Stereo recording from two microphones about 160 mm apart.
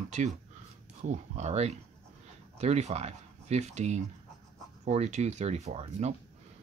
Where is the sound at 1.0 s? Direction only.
45° right (ahead or behind).